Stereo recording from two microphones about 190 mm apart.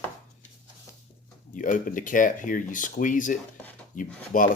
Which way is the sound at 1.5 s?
45° left (ahead or behind).